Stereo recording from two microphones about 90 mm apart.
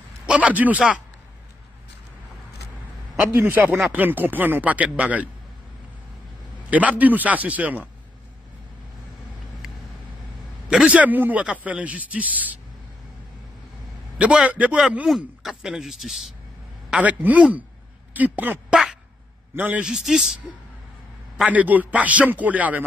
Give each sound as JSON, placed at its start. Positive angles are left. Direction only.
{"t": 0.3, "sound": "speech", "side_deg": -15}
{"t": 3.3, "sound": "a man's voice", "side_deg": -25}
{"t": 6.7, "sound": "speech", "side_deg": -15}
{"t": 10.7, "sound": "speech", "side_deg": -10}
{"t": 14.1, "sound": "speech", "side_deg": -10}
{"t": 15.0, "sound": "speech", "side_deg": -5}
{"t": 16.9, "sound": "a man's voice", "side_deg": -15}
{"t": 19.8, "sound": "speech", "side_deg": -5}
{"t": 21.5, "sound": "speech", "side_deg": -20}